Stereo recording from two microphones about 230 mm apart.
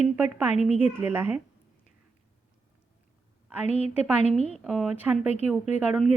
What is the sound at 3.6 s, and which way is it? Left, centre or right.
Speech, left.